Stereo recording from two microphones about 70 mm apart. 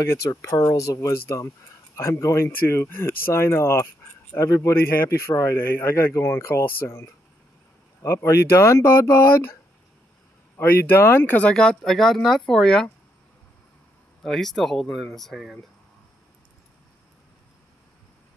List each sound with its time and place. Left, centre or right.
0.0 s speech: left
4.9 s speech: left
10.6 s speech: left
11.5 s speech: centre
14.2 s speech: centre